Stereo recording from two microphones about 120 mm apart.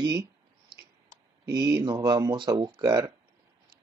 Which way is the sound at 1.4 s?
30° right (ahead or behind).